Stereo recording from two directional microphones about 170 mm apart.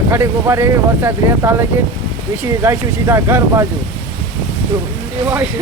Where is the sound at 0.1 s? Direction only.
15° right (ahead or behind).